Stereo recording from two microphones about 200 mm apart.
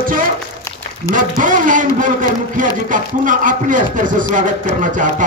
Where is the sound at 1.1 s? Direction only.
40° right (ahead or behind).